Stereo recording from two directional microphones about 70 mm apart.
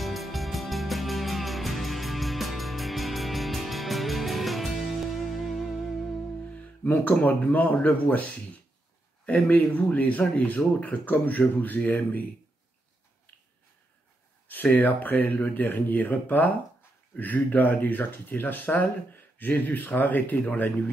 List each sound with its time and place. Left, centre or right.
0.0 s music: centre
6.5 s speech: left
14.5 s speech: left